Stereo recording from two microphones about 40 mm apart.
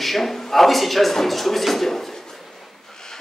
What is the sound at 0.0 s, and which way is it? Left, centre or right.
Speech, centre.